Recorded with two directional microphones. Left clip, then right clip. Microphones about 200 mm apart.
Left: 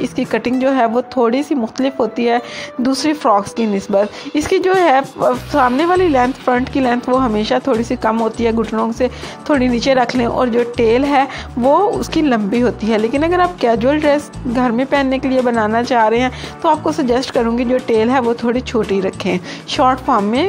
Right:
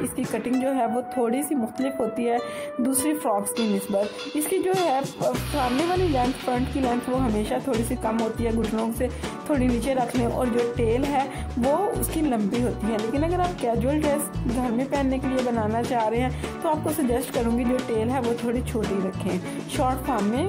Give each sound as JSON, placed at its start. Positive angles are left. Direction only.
{"t": 0.0, "sound": "a woman's voice", "side_deg": 10}
{"t": 5.2, "sound": "a woman's voice", "side_deg": 0}
{"t": 10.5, "sound": "speech", "side_deg": 0}
{"t": 11.7, "sound": "a woman's voice", "side_deg": 15}